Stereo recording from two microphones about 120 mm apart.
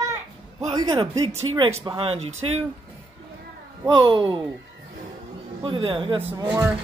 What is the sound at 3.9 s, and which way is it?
Speech, 40° right (ahead or behind).